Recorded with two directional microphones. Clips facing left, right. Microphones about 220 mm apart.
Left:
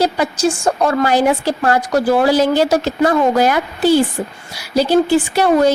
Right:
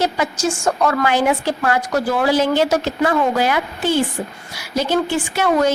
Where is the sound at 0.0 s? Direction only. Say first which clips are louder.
Left 4 dB; 35° left (ahead or behind).